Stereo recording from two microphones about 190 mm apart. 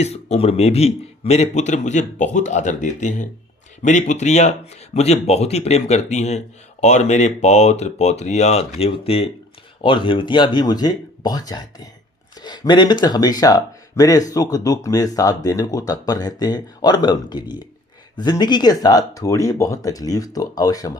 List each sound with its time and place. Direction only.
0.0 s a man's voice: 35° left (ahead or behind)